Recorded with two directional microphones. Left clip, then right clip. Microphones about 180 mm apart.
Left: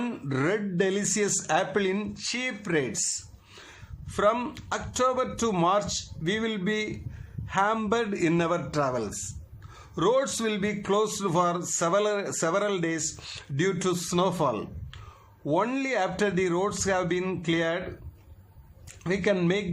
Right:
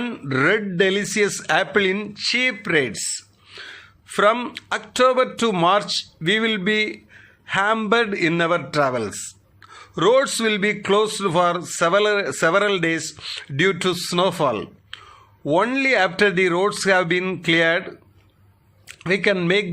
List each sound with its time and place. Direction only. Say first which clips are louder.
0.0 s a man's voice: right 9 dB; 10° right (ahead or behind)
3.6 s a sound: right 11 dB; 15° right (ahead or behind)
4.4 s a man's voice: right 5 dB; 10° right (ahead or behind)
18.9 s speech: right 7 dB; 15° right (ahead or behind)